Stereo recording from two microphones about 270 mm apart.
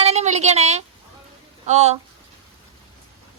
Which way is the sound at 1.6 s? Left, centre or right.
Right.